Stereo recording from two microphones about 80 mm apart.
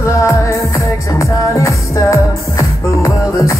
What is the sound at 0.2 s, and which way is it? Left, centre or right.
Music, left.